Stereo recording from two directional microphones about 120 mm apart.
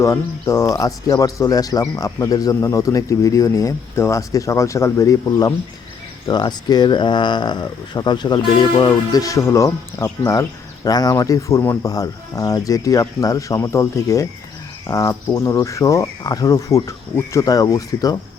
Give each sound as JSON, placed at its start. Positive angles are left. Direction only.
{"t": 0.0, "sound": "speech", "side_deg": 25}